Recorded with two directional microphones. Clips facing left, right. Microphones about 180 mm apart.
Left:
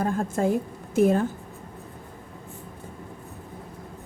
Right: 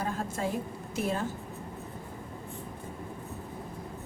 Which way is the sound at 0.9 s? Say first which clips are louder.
Left 12 dB; 50° left (ahead or behind).